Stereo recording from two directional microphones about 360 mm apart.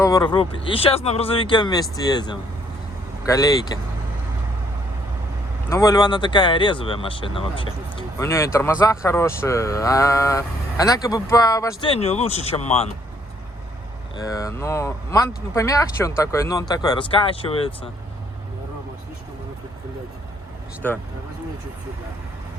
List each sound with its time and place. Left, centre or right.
0.0 s speech: centre
5.6 s speech: centre
14.2 s speech: centre
20.8 s speech: centre